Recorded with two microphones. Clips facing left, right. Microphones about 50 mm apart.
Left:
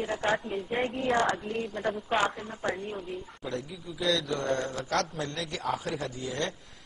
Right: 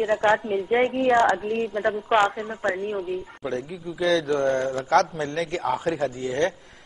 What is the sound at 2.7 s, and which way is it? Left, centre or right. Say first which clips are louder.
Speech: right 9 dB; centre.